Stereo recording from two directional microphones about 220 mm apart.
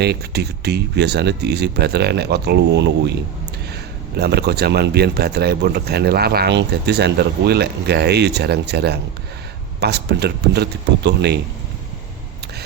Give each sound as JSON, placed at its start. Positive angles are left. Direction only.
{"t": 0.0, "sound": "speech", "side_deg": -50}
{"t": 4.2, "sound": "speech", "side_deg": -45}